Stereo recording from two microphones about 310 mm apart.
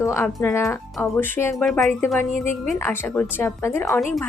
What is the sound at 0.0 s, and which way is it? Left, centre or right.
A woman's voice, centre.